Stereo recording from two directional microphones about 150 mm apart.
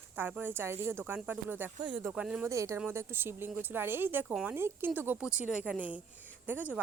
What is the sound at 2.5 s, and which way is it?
A woman's voice, 20° right (ahead or behind).